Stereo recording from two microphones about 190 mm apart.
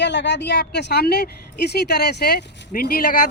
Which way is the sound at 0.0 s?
65° left (ahead or behind).